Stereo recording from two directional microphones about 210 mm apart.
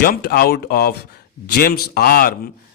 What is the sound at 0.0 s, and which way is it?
Speech, 45° left (ahead or behind).